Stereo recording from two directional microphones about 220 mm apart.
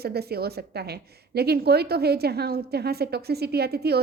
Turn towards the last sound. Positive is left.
turn(degrees=-45)  # may be behind; listen again after turning